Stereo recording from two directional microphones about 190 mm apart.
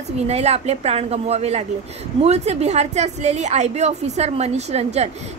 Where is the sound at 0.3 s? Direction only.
35° right (ahead or behind).